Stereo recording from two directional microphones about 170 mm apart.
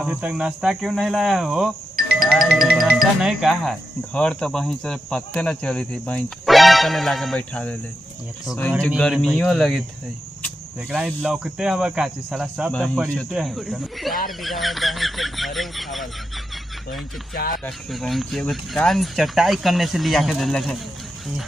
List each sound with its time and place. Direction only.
0.0 s speech: 5° right (ahead or behind)
8.8 s speech: centre (ahead or behind)
11.2 s speech: 5° right (ahead or behind)
17.3 s speech: 60° left (ahead or behind)
17.6 s speech: centre (ahead or behind)